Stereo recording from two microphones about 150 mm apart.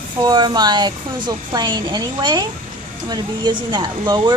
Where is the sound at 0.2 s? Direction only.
30° right (ahead or behind).